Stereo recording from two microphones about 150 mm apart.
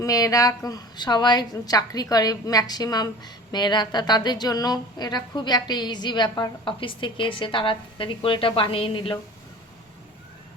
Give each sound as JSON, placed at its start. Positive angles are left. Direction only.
{"t": 0.0, "sound": "a woman's voice", "side_deg": 25}